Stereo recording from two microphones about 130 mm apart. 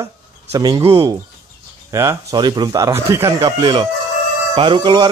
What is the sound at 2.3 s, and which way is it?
Speech, 35° right (ahead or behind).